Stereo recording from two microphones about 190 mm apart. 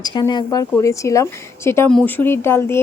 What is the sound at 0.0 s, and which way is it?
Speech, 25° left (ahead or behind).